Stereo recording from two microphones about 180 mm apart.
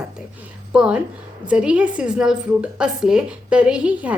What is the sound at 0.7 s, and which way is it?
A woman's voice, 5° right (ahead or behind).